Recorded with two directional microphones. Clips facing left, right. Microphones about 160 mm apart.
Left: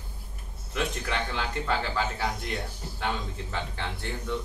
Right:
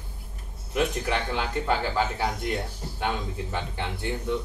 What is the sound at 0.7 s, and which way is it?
Speech, 15° right (ahead or behind).